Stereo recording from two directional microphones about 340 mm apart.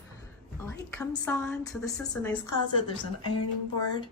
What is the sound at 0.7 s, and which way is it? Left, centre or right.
A woman's voice, centre.